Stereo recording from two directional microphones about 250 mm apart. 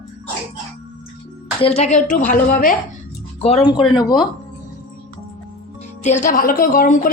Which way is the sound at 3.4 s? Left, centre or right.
Left.